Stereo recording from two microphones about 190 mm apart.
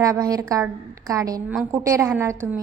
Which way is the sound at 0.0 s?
20° right (ahead or behind).